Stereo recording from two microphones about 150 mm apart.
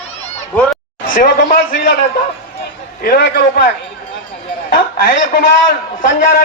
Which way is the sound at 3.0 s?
85° left.